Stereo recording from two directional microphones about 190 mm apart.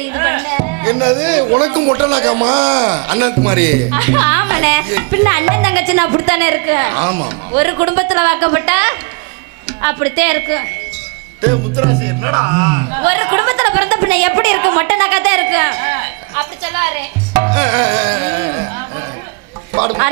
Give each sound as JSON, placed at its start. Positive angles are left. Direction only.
{"t": 0.1, "sound": "music", "side_deg": -20}
{"t": 1.9, "sound": "a man's voice", "side_deg": -30}
{"t": 3.1, "sound": "a man's voice", "side_deg": -20}
{"t": 7.6, "sound": "speech", "side_deg": -20}
{"t": 17.3, "sound": "music", "side_deg": -20}